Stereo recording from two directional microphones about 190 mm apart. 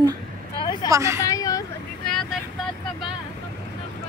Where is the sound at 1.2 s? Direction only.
20° left (ahead or behind).